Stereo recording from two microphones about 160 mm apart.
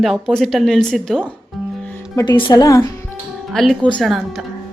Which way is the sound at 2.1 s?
25° left (ahead or behind).